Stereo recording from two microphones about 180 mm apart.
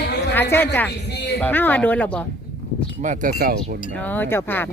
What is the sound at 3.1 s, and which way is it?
Speech, 50° right (ahead or behind).